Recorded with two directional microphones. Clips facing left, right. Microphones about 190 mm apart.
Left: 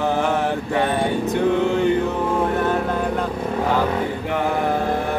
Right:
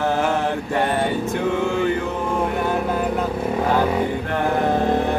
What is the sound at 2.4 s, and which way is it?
Vehicle, 10° right (ahead or behind).